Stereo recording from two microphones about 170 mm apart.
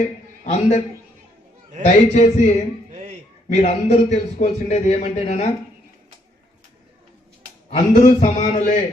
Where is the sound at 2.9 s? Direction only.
40° right (ahead or behind).